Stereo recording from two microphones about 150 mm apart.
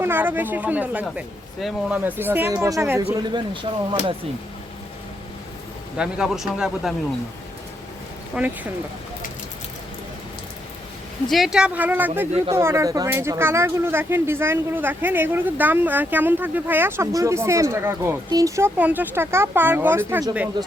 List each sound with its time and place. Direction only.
0.0 s speech: 15° right (ahead or behind)
3.2 s speech: 30° right (ahead or behind)
6.0 s speech: 5° right (ahead or behind)
8.4 s speech: 10° right (ahead or behind)
11.3 s speech: centre (ahead or behind)
20.6 s speech: 30° right (ahead or behind)